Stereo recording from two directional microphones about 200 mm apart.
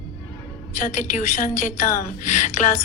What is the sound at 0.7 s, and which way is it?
A woman's voice, 40° left (ahead or behind).